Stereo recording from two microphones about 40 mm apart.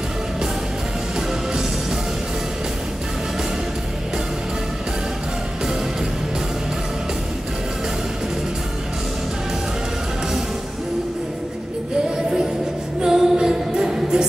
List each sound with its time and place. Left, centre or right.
1.5 s music: centre
13.0 s music: centre